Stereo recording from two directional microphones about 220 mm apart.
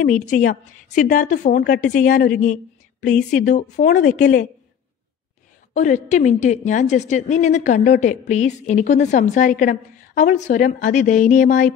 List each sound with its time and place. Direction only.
0.0 s a woman's voice: 35° left (ahead or behind)
5.8 s a woman's voice: 35° left (ahead or behind)